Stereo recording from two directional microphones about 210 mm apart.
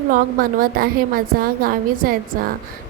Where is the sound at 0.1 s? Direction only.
45° right (ahead or behind).